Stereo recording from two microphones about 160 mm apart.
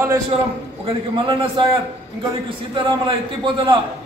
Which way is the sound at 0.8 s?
30° right (ahead or behind).